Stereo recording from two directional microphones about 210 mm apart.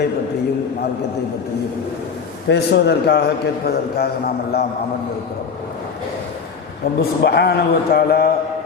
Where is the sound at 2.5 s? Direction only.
55° left (ahead or behind).